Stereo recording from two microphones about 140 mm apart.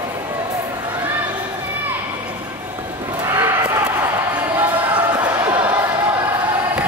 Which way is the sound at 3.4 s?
15° right (ahead or behind).